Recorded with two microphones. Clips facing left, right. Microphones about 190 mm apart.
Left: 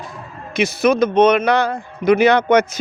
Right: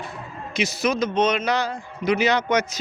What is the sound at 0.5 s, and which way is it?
Speech, 55° left (ahead or behind).